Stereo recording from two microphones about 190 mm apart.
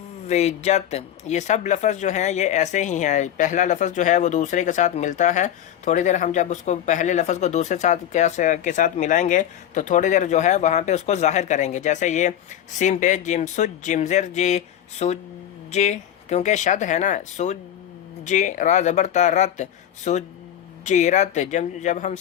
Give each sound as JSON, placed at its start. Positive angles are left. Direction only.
{"t": 0.3, "sound": "speech", "side_deg": 35}